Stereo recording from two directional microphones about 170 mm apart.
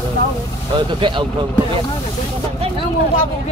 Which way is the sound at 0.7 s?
30° right (ahead or behind).